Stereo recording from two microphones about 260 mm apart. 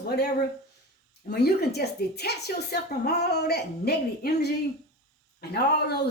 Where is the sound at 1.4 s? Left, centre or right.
Left.